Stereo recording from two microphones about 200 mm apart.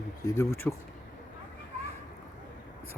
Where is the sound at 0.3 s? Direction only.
15° left (ahead or behind).